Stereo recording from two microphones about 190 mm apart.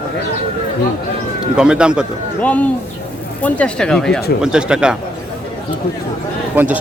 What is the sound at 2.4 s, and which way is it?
Speech, 5° left (ahead or behind).